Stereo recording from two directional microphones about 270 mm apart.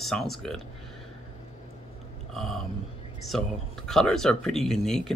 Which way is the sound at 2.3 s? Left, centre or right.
Centre.